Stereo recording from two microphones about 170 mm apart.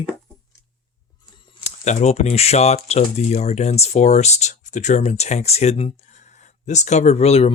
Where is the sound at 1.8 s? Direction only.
40° left (ahead or behind).